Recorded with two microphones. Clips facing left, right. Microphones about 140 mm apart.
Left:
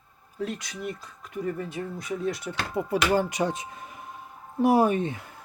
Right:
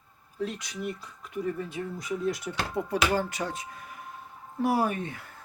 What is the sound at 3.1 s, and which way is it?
Speech, 15° left (ahead or behind).